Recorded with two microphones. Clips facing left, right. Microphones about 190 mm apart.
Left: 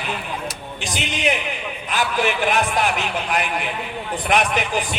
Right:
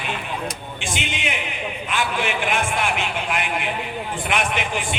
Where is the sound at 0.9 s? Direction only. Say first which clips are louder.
Left 6 dB; 40° left (ahead or behind).